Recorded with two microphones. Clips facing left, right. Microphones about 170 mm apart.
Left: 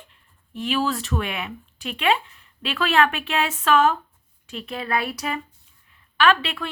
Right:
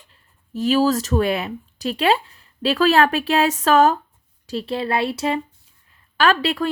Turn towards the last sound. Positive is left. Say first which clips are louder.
# right 2 dB
turn(degrees=-40)  # may be behind; listen again after turning